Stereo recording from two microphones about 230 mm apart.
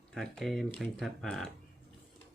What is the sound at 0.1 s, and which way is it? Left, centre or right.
Speech, centre.